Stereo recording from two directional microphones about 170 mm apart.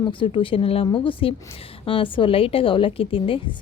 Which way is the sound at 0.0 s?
30° left (ahead or behind).